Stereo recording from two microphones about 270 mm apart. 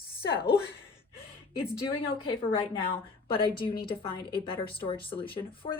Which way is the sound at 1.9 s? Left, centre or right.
Centre.